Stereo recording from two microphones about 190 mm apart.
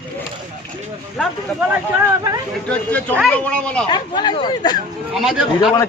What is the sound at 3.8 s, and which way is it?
Speech, 25° left (ahead or behind).